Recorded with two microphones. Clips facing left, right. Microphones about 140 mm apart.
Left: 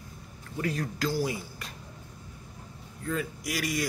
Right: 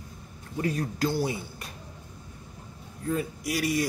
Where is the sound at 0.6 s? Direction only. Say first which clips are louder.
Right 3 dB; 25° right (ahead or behind).